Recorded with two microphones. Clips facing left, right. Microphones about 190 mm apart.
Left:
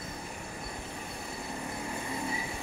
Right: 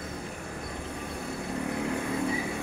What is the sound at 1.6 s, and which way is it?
Vehicle, 65° right (ahead or behind).